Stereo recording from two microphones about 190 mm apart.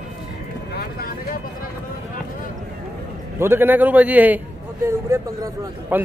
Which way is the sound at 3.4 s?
10° right (ahead or behind).